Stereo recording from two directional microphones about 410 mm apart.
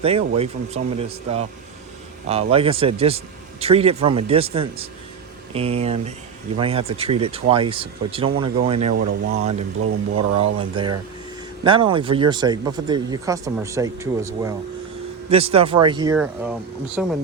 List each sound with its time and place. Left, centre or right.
0.0 s speech: centre
9.8 s speech: right
10.4 s speech: centre